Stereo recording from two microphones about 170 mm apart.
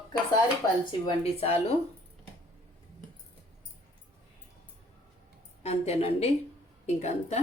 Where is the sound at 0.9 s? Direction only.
35° left (ahead or behind).